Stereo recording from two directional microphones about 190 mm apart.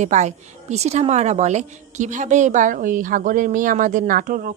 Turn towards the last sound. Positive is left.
turn(degrees=-45)  # may be behind; listen again after turning